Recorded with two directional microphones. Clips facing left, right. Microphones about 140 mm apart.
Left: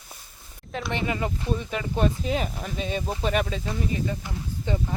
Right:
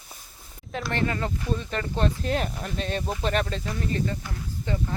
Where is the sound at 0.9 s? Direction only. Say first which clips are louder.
Right 1 dB; 15° left (ahead or behind).